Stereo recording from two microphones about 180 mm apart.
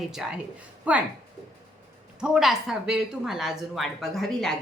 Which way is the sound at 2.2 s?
5° right (ahead or behind).